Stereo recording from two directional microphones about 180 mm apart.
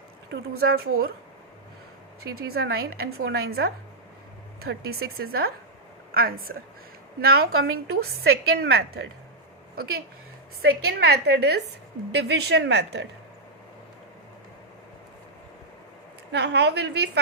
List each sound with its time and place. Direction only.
0.3 s a woman's voice: 60° right (ahead or behind)
2.5 s a woman's voice: 60° right (ahead or behind)
10.6 s a woman's voice: 60° right (ahead or behind)
16.3 s a woman's voice: 70° right (ahead or behind)